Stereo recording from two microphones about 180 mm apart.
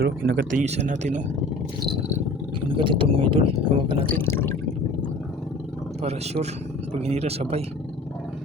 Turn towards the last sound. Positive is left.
turn(degrees=-35)  # may be behind; listen again after turning